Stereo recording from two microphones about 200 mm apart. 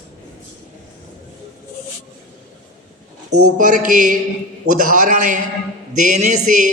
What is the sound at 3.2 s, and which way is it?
Speech, 90° right.